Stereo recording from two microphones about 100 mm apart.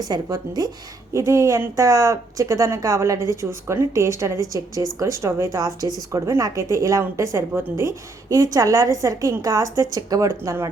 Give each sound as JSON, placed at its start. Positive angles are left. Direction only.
{"t": 0.0, "sound": "a woman's voice", "side_deg": -35}